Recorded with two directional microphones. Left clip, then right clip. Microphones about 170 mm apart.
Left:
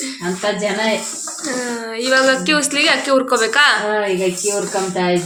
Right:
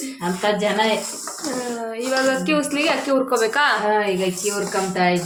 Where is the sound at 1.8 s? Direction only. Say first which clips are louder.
Left 7 dB; 5° right (ahead or behind).